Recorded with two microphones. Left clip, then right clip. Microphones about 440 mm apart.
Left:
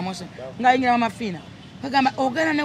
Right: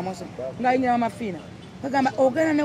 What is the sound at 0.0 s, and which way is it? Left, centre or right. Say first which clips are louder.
A man's voice: right 1 dB; left.